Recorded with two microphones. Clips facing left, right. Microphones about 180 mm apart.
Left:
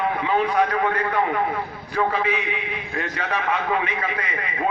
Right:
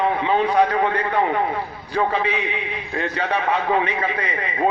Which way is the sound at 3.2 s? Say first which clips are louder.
Right 3 dB; 30° right (ahead or behind).